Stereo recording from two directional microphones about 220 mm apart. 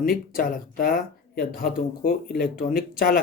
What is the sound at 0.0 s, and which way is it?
Speech, 40° left (ahead or behind).